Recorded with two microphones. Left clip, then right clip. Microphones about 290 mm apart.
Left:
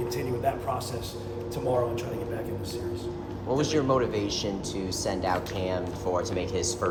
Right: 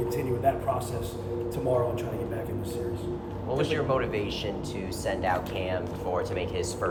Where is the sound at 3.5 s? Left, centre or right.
Left.